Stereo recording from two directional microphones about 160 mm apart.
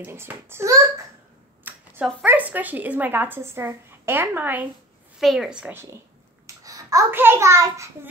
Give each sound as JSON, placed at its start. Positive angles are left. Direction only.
{"t": 0.0, "sound": "a child's voice", "side_deg": -15}
{"t": 1.6, "sound": "a sound", "side_deg": -10}
{"t": 2.2, "sound": "a woman's voice", "side_deg": -10}